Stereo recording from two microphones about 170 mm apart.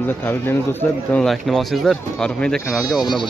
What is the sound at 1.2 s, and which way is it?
Speech, centre (ahead or behind).